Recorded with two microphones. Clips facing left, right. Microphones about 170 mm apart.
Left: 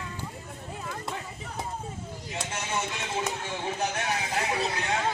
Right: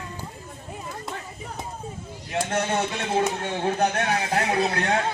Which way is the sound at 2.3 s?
60° right (ahead or behind).